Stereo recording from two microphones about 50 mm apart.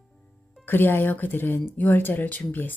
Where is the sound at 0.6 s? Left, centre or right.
Left.